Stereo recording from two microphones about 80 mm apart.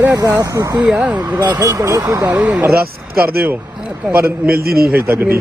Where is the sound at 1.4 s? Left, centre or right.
Right.